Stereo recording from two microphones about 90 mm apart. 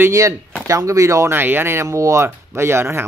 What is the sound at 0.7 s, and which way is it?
Speech, 35° right (ahead or behind).